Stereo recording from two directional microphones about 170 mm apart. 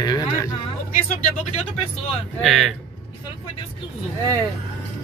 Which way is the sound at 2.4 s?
Centre (ahead or behind).